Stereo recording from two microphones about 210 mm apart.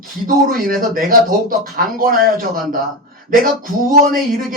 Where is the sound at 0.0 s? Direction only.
40° right (ahead or behind).